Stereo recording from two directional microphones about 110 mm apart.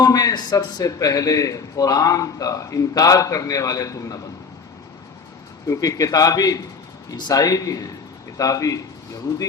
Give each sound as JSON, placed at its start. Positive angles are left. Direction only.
{"t": 0.0, "sound": "a man's voice", "side_deg": 35}
{"t": 5.6, "sound": "a man's voice", "side_deg": 30}